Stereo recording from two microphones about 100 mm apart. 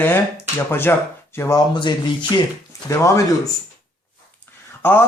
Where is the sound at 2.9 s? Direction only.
30° left (ahead or behind).